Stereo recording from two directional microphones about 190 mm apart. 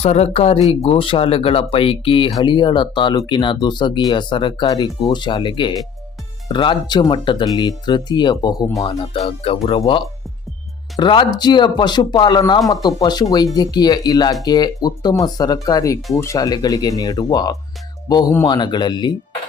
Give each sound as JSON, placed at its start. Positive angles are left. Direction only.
{"t": 0.0, "sound": "speech", "side_deg": 35}